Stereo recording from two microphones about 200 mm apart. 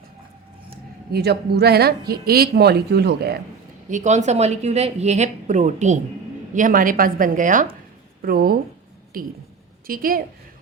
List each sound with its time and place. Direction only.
1.1 s a woman's voice: 55° right (ahead or behind)
3.8 s a woman's voice: 35° right (ahead or behind)